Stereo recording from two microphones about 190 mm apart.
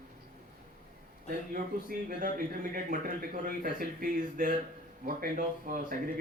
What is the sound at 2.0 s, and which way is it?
A man's voice, 50° right (ahead or behind).